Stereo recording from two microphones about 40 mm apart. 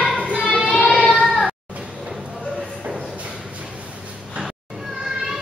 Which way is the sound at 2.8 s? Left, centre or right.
Right.